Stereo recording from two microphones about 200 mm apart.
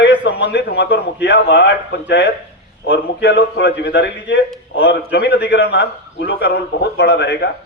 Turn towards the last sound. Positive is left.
turn(degrees=55)  # may be behind; listen again after turning